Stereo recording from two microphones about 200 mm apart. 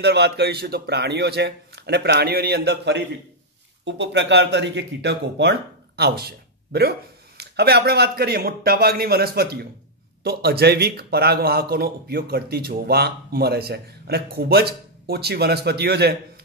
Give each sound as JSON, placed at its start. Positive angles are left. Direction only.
{"t": 0.0, "sound": "speech", "side_deg": -55}